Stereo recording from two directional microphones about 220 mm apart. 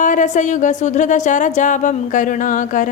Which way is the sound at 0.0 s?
35° left (ahead or behind).